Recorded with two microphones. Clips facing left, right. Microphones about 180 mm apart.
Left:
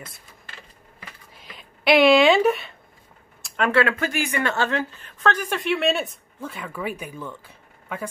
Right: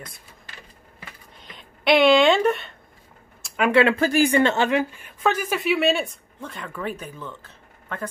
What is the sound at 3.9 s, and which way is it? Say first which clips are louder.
Speech: right 7 dB; 35° right (ahead or behind).